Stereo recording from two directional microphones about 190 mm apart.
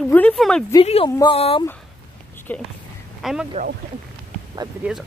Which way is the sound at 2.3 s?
10° left (ahead or behind).